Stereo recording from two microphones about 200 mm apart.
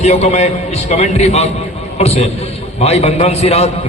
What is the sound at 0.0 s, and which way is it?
A man's voice, 35° left (ahead or behind).